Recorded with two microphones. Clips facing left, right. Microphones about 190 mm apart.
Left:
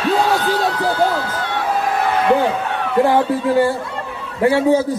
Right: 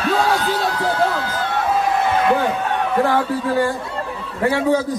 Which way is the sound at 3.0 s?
15° left (ahead or behind).